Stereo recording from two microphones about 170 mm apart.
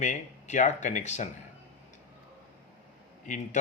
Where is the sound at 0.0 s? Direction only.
45° left (ahead or behind).